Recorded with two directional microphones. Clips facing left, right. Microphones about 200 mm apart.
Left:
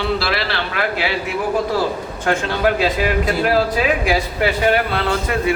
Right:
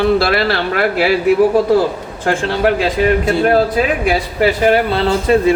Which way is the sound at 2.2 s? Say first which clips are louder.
Right 3 dB; 30° right (ahead or behind).